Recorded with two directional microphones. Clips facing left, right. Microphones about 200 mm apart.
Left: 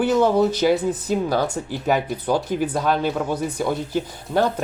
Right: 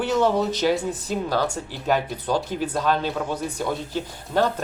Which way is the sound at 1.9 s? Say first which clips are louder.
Left 2 dB; 10° left (ahead or behind).